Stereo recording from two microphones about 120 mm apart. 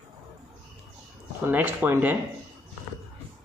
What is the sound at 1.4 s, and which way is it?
Speech, 15° right (ahead or behind).